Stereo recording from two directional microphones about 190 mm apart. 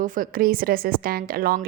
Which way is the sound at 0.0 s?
45° right (ahead or behind).